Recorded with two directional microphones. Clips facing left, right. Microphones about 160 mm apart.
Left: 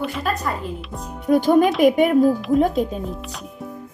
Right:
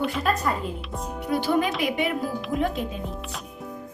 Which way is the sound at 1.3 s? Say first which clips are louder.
Left 8 dB; 45° left (ahead or behind).